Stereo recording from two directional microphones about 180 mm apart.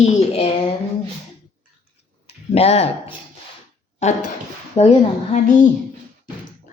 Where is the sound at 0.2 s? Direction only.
35° left (ahead or behind).